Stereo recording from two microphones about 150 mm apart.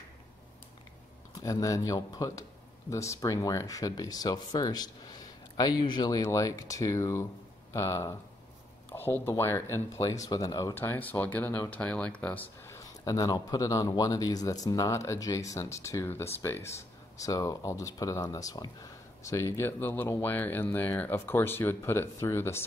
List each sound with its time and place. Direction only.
1.3 s speech: 20° left (ahead or behind)